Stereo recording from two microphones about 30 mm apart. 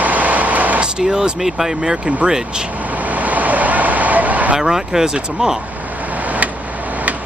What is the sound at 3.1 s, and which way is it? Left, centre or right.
Vehicle, right.